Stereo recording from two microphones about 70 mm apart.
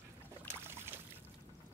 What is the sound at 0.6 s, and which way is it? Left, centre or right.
Boat, right.